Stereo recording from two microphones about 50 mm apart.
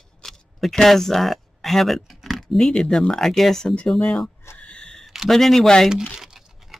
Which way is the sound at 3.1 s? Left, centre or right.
Centre.